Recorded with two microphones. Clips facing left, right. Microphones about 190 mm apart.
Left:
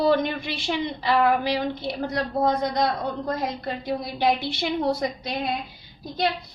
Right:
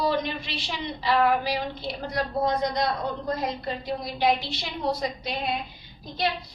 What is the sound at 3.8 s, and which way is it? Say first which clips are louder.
A woman's voice: left 1 dB; 55° left (ahead or behind).